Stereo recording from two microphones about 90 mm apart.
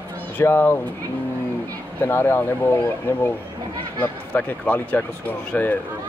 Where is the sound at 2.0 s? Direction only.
25° left (ahead or behind).